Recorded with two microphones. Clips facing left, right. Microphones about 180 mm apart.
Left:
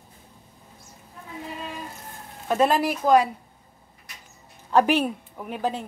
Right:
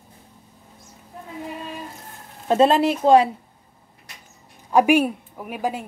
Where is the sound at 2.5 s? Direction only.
25° right (ahead or behind).